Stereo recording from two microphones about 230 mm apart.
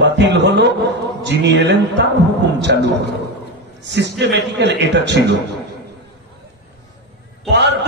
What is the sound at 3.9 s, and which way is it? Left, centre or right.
A man's voice, right.